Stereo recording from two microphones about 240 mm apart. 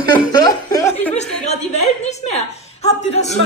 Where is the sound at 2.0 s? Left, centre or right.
Left.